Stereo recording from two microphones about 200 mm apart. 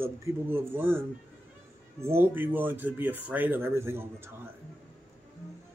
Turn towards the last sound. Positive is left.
turn(degrees=-10)  # may be behind; listen again after turning